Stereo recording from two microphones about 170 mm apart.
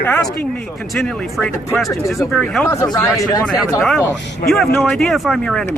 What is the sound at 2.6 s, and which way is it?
Speech, 15° left (ahead or behind).